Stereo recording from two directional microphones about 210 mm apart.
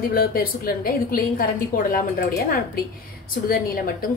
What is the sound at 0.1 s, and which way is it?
A woman's voice, 45° left (ahead or behind).